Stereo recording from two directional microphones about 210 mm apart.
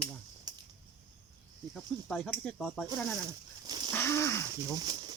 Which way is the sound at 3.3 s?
20° right (ahead or behind).